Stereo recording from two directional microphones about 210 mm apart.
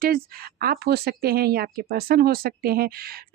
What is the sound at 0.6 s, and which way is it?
A woman's voice, 50° right (ahead or behind).